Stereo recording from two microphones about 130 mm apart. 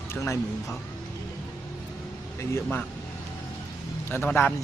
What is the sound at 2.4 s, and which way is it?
Speech, 15° left (ahead or behind).